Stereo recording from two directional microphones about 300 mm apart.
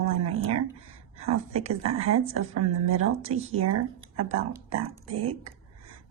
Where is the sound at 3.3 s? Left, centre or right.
Right.